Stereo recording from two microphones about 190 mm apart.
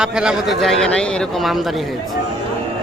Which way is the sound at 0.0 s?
5° right (ahead or behind).